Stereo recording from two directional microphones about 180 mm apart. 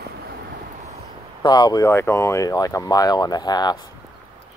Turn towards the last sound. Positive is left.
turn(degrees=20)  # may be behind; listen again after turning